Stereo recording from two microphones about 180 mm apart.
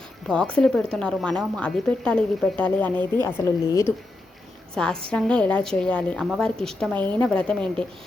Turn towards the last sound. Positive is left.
turn(degrees=5)  # may be behind; listen again after turning